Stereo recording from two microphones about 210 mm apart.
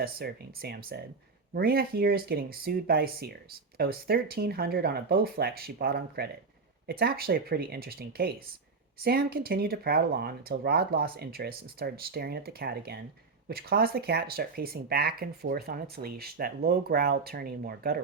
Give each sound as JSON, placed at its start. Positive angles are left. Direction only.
{"t": 0.0, "sound": "speech", "side_deg": -45}